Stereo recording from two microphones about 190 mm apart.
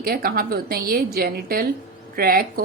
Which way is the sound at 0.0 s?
50° right (ahead or behind).